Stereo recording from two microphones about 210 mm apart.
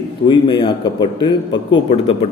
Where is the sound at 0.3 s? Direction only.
25° left (ahead or behind).